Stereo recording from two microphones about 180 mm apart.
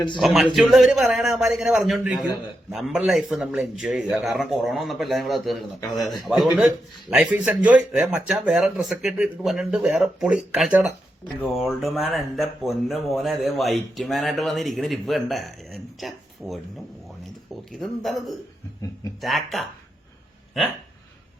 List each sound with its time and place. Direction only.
0.2 s speech: centre (ahead or behind)
2.1 s a man's voice: 20° left (ahead or behind)
2.6 s speech: centre (ahead or behind)
17.7 s speech: centre (ahead or behind)